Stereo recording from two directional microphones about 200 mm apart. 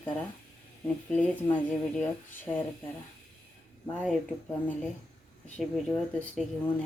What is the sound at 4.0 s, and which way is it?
Speech, 5° left (ahead or behind).